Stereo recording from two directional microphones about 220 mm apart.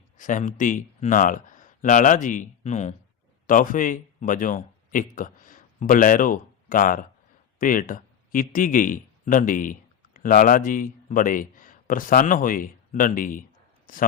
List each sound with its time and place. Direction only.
0.2 s a man's voice: 35° left (ahead or behind)